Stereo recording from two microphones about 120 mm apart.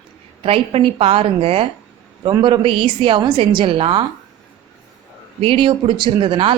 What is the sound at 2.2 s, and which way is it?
A woman's voice, 40° right (ahead or behind).